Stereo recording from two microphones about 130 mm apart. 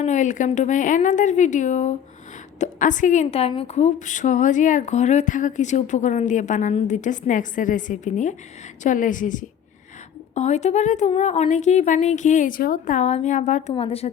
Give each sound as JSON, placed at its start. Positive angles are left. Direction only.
{"t": 0.0, "sound": "a woman's voice", "side_deg": 70}
{"t": 2.6, "sound": "a woman's voice", "side_deg": 75}
{"t": 8.8, "sound": "a woman's voice", "side_deg": 85}
{"t": 10.3, "sound": "a woman's voice", "side_deg": 60}
{"t": 13.7, "sound": "speech", "side_deg": 50}